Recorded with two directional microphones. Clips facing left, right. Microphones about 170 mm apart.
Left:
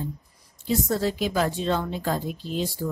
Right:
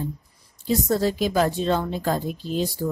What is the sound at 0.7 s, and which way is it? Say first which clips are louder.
Speech: right 3 dB; 40° right (ahead or behind).